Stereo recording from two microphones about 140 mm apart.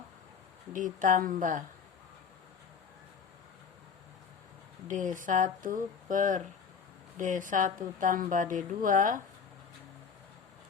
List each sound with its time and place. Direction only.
0.7 s speech: 70° right (ahead or behind)
4.9 s speech: 65° right (ahead or behind)